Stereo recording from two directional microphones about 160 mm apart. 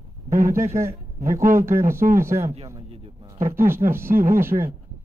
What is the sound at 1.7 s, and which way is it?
Speech, 15° right (ahead or behind).